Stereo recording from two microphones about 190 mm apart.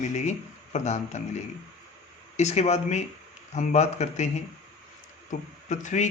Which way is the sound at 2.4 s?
35° left (ahead or behind).